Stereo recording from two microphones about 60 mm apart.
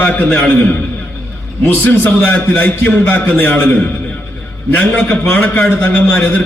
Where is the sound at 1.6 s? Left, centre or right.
Left.